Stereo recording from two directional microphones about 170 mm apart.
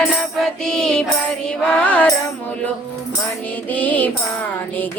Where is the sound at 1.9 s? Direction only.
10° left (ahead or behind).